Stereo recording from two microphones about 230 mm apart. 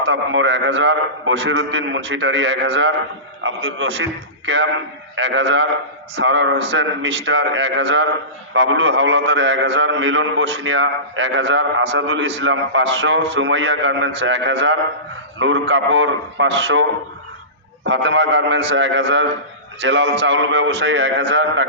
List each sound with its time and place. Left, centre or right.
0.0 s a man's voice: right
17.8 s a man's voice: right